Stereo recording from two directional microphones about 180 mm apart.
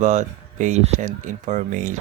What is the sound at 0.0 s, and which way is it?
Speech, 40° right (ahead or behind).